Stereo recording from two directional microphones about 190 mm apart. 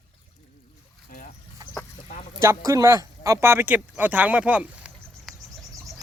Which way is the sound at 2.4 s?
15° right (ahead or behind).